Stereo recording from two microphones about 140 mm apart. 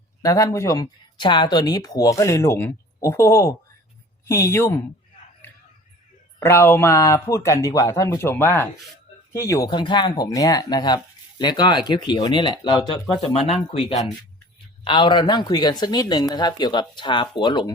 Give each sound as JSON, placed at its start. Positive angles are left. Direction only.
{"t": 0.2, "sound": "speech", "side_deg": 25}
{"t": 6.4, "sound": "speech", "side_deg": 15}
{"t": 13.7, "sound": "speech", "side_deg": 45}